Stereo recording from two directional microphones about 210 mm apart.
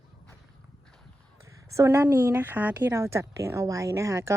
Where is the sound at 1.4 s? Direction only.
15° right (ahead or behind).